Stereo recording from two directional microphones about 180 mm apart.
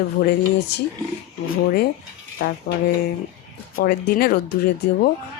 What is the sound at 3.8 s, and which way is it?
Speech, 60° left (ahead or behind).